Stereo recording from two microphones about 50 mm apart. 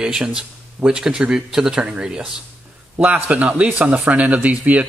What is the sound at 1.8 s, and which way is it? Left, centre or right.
A man's voice, right.